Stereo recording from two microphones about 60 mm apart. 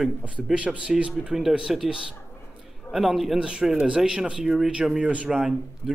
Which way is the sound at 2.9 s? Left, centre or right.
Centre.